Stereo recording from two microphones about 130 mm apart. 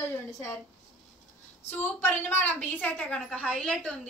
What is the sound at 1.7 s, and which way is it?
A woman's voice, 15° left (ahead or behind).